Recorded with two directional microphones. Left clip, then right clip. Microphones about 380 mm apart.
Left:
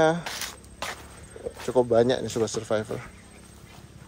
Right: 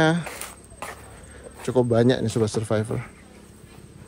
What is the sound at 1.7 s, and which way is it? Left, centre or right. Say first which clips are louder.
A man's voice: right 1 dB; centre.